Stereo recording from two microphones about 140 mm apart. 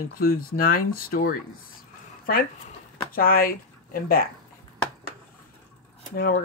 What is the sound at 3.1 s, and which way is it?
Speech, 90° left.